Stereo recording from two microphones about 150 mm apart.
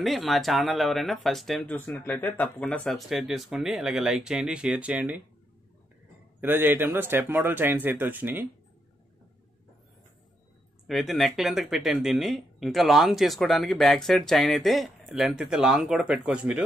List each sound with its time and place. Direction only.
0.0 s speech: centre (ahead or behind)
6.4 s speech: 15° right (ahead or behind)
10.9 s speech: centre (ahead or behind)